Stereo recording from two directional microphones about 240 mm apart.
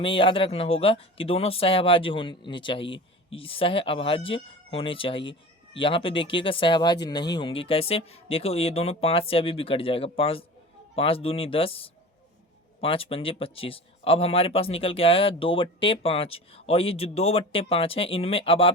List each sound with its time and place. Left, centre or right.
0.0 s speech: left